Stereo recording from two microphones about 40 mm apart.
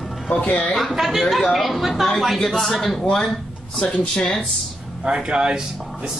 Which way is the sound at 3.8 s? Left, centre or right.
Centre.